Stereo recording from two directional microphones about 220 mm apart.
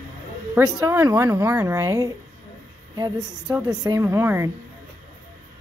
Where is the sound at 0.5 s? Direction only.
15° right (ahead or behind).